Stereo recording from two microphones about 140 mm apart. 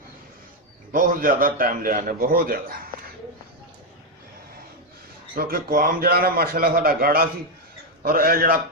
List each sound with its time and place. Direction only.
0.9 s a man's voice: 80° right
5.3 s a man's voice: 90° right